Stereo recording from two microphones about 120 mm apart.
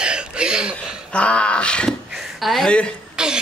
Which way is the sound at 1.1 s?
10° left (ahead or behind).